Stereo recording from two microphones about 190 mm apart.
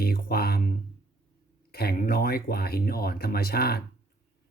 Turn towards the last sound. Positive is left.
turn(degrees=55)  # may be behind; listen again after turning